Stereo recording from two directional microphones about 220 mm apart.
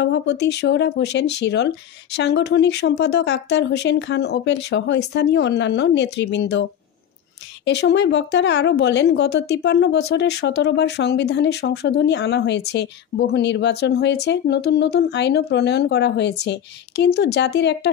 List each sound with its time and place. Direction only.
0.0 s a woman's voice: 55° left (ahead or behind)
7.6 s a woman's voice: 50° left (ahead or behind)